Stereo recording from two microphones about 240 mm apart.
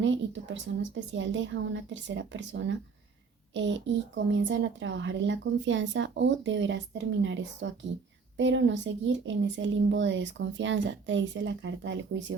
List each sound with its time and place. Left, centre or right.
0.0 s a woman's voice: right